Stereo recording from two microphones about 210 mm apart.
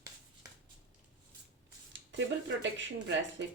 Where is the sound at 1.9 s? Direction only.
60° right (ahead or behind).